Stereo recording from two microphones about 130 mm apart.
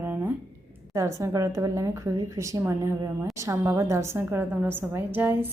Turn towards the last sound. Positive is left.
turn(degrees=-15)  # may be behind; listen again after turning